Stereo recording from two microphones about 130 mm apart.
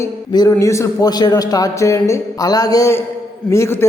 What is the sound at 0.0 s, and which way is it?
A man's voice, 25° left (ahead or behind).